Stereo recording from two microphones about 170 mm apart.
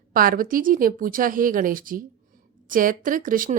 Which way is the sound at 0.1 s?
55° right (ahead or behind).